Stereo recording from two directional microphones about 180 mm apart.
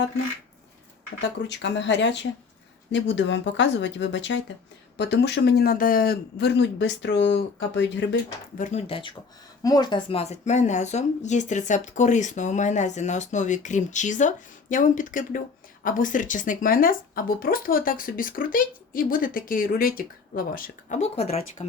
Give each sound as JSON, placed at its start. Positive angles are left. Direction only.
{"t": 1.2, "sound": "speech", "side_deg": 75}
{"t": 4.9, "sound": "speech", "side_deg": 70}
{"t": 8.5, "sound": "speech", "side_deg": 45}
{"t": 8.9, "sound": "speech", "side_deg": 30}
{"t": 21.0, "sound": "speech", "side_deg": 35}